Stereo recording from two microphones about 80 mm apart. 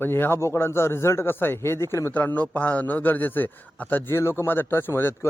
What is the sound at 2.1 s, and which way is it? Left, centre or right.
A man's voice, left.